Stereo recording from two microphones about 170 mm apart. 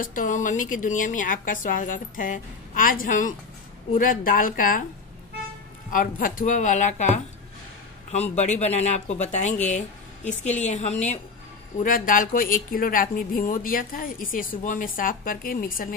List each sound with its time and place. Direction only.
0.0 s a woman's voice: 55° left (ahead or behind)
5.9 s a woman's voice: 55° left (ahead or behind)
11.8 s a woman's voice: 55° left (ahead or behind)